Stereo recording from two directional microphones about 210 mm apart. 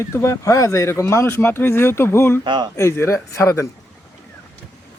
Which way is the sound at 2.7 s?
10° left (ahead or behind).